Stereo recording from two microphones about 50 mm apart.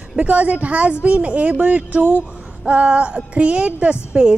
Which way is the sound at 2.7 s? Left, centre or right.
Right.